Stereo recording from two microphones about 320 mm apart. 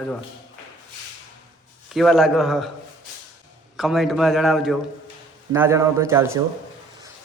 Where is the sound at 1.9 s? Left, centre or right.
Centre.